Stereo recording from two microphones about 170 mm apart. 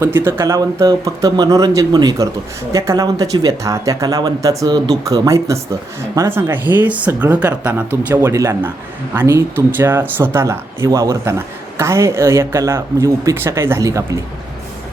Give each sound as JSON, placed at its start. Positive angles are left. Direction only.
{"t": 0.0, "sound": "speech", "side_deg": -15}